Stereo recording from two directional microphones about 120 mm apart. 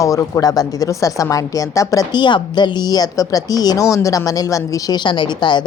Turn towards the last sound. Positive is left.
turn(degrees=40)  # may be behind; listen again after turning